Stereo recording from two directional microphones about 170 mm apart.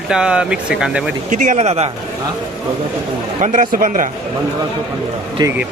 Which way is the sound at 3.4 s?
45° right (ahead or behind).